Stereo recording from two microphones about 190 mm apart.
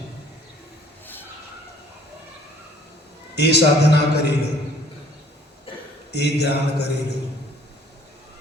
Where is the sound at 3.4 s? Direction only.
60° left (ahead or behind).